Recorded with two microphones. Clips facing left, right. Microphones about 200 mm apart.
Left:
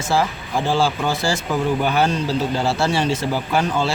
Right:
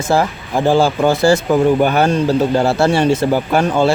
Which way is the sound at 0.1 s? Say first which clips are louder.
Right 4 dB; 50° right (ahead or behind).